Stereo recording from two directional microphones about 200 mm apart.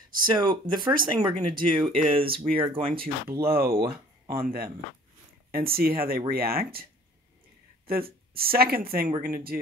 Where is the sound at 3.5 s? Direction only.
50° right (ahead or behind).